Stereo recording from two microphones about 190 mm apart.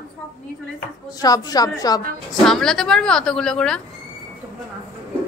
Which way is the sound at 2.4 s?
5° left (ahead or behind).